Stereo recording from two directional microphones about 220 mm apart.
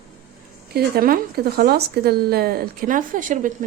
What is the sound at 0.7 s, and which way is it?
Speech, 45° right (ahead or behind).